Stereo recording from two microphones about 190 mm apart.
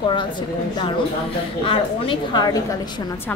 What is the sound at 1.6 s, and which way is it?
Speech, 25° left (ahead or behind).